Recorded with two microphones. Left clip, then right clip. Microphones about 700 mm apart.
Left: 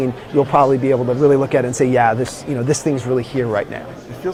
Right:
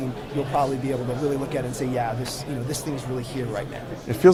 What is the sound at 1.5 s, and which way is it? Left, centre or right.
Speech, left.